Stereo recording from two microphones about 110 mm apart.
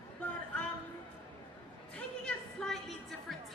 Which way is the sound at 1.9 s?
5° left (ahead or behind).